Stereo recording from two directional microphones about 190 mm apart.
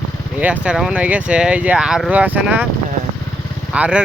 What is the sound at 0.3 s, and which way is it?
Speech, 5° right (ahead or behind).